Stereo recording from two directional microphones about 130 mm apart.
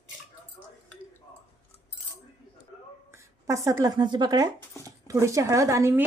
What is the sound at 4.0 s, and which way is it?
A woman's voice, 35° right (ahead or behind).